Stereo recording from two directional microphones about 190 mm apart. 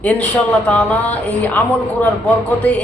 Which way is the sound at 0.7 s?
5° left (ahead or behind).